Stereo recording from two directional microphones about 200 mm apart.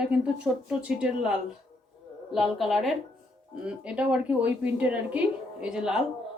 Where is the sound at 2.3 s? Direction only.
Centre (ahead or behind).